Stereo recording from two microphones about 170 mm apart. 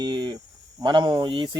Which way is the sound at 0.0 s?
25° right (ahead or behind).